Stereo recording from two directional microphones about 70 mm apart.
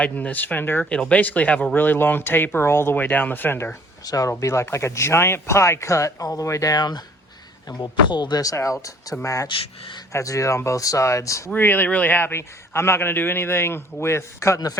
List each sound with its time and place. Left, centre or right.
0.0 s speech: left
0.9 s speech: centre; by 3.8 s left
4.0 s speech: left
4.3 s speech: left
6.7 s speech: left
9.2 s speech: left
11.5 s a man's voice: left